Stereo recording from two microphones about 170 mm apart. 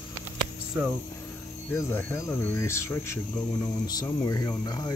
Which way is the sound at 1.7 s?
15° left (ahead or behind).